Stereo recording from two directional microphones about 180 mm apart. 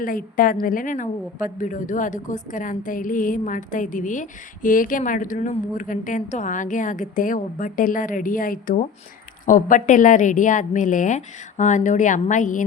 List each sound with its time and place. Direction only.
0.0 s a woman's voice: 50° left (ahead or behind)